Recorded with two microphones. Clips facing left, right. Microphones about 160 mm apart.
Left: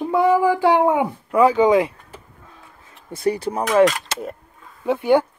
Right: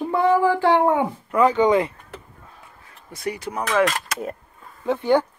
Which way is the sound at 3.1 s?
30° left (ahead or behind).